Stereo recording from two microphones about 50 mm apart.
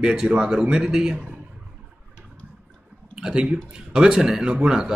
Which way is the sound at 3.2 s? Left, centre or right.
Centre.